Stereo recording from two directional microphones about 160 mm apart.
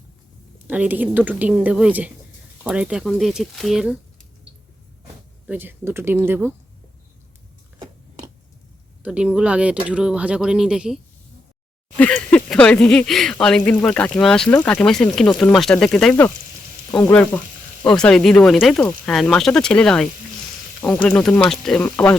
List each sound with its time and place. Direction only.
0.7 s a woman's voice: 10° right (ahead or behind)
5.5 s a woman's voice: 10° right (ahead or behind)
9.0 s a woman's voice: 5° right (ahead or behind)
11.9 s speech: 10° left (ahead or behind)